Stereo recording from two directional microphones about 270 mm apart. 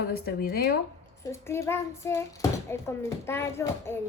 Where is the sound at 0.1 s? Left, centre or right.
Left.